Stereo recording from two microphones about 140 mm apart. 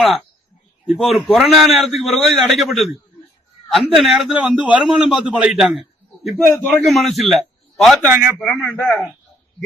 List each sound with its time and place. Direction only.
0.9 s a man's voice: centre (ahead or behind)
6.5 s a man's voice: 10° left (ahead or behind)
8.0 s a man's voice: 15° right (ahead or behind)
8.4 s a man's voice: 10° left (ahead or behind)